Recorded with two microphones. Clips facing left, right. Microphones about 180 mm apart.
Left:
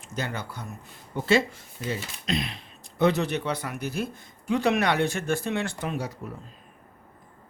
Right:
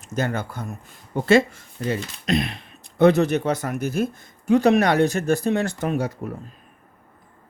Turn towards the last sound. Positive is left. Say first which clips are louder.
# right 7 dB
turn(degrees=-55)  # may be behind; listen again after turning